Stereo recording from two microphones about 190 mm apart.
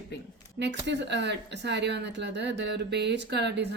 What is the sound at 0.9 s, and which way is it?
Speech, 65° right (ahead or behind).